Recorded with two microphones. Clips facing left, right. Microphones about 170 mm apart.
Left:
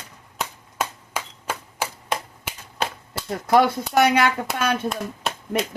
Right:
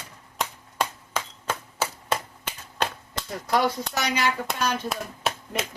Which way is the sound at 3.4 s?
60° left (ahead or behind).